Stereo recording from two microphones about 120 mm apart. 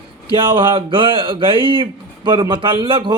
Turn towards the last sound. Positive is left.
turn(degrees=-45)  # may be behind; listen again after turning